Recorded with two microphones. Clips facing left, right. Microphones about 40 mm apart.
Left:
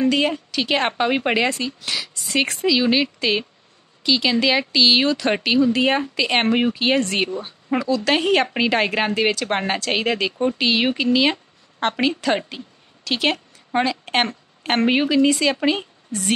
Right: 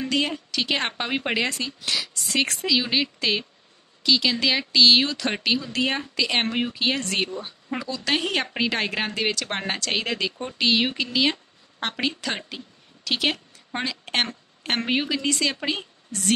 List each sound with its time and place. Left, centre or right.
0.0 s a woman's voice: centre
7.8 s a woman's voice: centre